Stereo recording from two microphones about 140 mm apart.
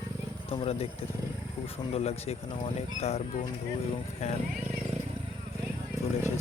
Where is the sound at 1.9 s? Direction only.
50° left (ahead or behind).